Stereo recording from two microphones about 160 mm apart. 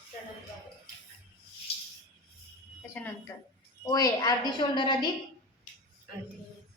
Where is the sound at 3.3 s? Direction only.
15° left (ahead or behind).